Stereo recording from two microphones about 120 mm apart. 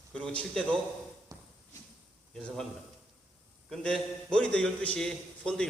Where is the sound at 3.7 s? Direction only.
5° left (ahead or behind).